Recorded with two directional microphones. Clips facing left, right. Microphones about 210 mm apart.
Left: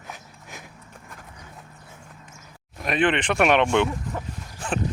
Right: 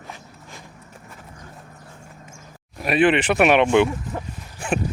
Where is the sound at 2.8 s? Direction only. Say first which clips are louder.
Right 5 dB; 10° right (ahead or behind).